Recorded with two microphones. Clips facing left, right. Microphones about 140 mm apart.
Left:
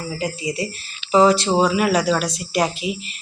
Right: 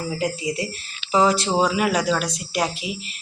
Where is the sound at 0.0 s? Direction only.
Centre (ahead or behind).